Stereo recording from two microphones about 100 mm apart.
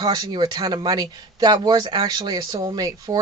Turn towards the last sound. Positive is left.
turn(degrees=-40)  # may be behind; listen again after turning